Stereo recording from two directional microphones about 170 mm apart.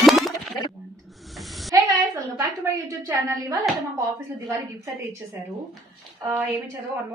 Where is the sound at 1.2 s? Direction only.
Centre (ahead or behind).